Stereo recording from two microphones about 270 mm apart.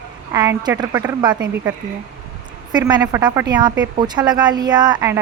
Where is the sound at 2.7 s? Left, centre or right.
Centre.